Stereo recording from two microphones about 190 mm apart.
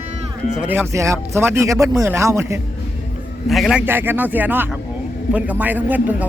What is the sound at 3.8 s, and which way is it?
Speech, 10° right (ahead or behind).